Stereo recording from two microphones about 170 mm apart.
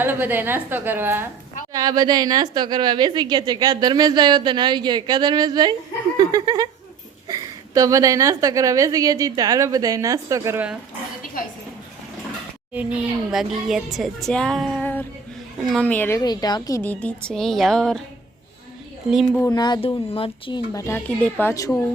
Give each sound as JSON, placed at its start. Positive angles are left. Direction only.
{"t": 0.0, "sound": "a woman's voice", "side_deg": -10}
{"t": 1.7, "sound": "a woman's voice", "side_deg": -25}
{"t": 12.7, "sound": "a woman's voice", "side_deg": -10}
{"t": 16.8, "sound": "speech", "side_deg": 10}
{"t": 19.4, "sound": "speech", "side_deg": 25}
{"t": 20.7, "sound": "a woman's voice", "side_deg": 15}